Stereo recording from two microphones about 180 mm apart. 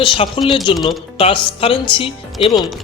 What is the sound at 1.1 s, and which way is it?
Speech, 30° left (ahead or behind).